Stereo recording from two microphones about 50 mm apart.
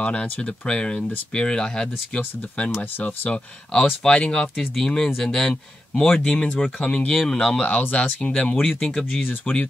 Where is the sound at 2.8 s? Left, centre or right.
Left.